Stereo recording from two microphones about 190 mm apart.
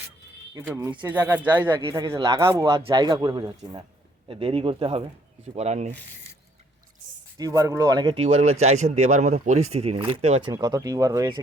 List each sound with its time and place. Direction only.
0.7 s speech: 10° right (ahead or behind)
1.7 s speech: 20° right (ahead or behind)
7.3 s speech: 20° right (ahead or behind)
10.5 s speech: 20° right (ahead or behind)